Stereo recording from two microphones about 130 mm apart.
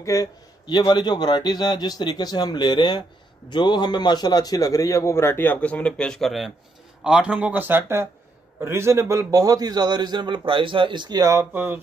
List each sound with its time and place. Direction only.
0.0 s a man's voice: 25° left (ahead or behind); by 11.4 s 30° right (ahead or behind)
11.5 s speech: 15° right (ahead or behind)